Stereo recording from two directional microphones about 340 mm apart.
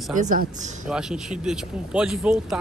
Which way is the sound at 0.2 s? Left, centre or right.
Right.